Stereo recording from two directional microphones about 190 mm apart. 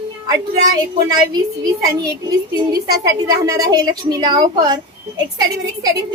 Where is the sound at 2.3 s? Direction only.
20° right (ahead or behind).